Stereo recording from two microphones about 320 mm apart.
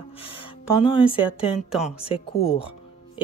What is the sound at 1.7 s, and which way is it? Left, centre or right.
Speech, centre.